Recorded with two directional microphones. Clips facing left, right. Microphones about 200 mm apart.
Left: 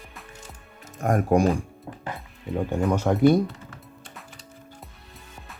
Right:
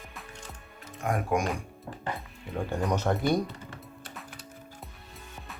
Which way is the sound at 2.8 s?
10° left (ahead or behind).